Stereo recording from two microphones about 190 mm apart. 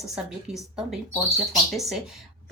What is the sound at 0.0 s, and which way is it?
A woman's voice, centre (ahead or behind).